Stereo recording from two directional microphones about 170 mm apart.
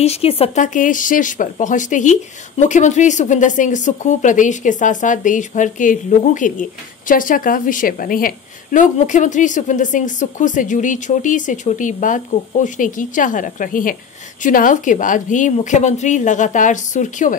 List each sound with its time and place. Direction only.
0.0 s speech: 35° left (ahead or behind)
0.7 s speech: 50° left (ahead or behind)